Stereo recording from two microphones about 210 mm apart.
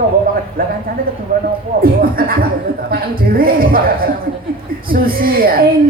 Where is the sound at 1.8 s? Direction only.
45° right (ahead or behind).